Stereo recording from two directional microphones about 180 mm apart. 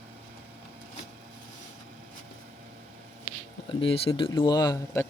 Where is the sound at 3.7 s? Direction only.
30° left (ahead or behind).